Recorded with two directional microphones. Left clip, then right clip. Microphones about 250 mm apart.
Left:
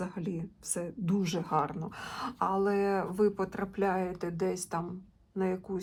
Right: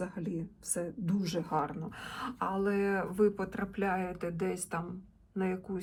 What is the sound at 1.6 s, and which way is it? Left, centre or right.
Speech, centre.